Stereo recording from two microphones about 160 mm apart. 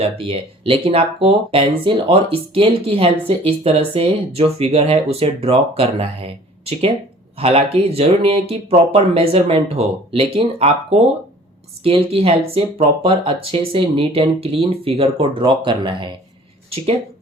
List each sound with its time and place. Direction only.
0.0 s speech: 35° right (ahead or behind)